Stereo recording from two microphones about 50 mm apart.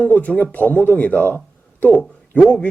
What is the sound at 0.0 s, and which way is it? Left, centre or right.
Speech, left.